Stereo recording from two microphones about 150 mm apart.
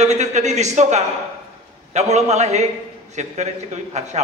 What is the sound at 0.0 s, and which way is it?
A man's voice, 50° right (ahead or behind).